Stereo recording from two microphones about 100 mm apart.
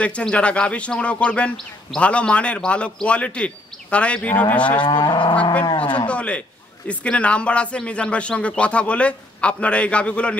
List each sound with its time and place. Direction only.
0.0 s a man's voice: 10° left (ahead or behind)
4.8 s livestock: 45° left (ahead or behind)
5.3 s a man's voice: 15° left (ahead or behind)